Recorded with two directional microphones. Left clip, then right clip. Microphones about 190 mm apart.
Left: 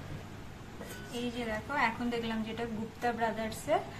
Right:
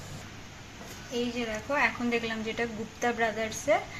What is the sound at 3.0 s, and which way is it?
Speech, 35° right (ahead or behind).